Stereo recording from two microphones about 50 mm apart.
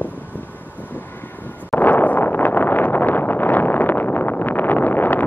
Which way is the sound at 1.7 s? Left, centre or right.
Left.